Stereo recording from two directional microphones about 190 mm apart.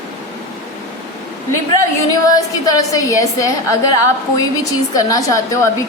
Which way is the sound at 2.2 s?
20° left (ahead or behind).